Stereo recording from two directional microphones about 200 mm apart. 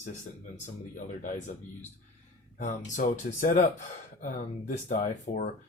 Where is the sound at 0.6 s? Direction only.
40° left (ahead or behind).